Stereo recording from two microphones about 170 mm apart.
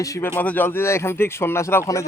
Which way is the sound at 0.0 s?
15° left (ahead or behind).